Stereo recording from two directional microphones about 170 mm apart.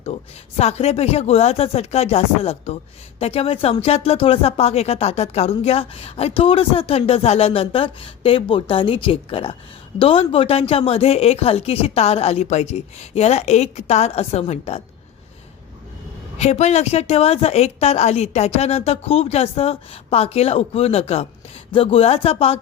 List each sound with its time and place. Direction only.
0.6 s speech: 40° left (ahead or behind)
16.4 s speech: 40° left (ahead or behind)